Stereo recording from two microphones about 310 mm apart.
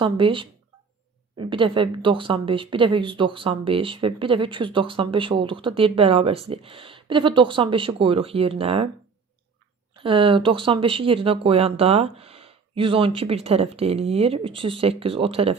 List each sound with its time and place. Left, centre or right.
0.0 s a woman's voice: centre
9.9 s a woman's voice: centre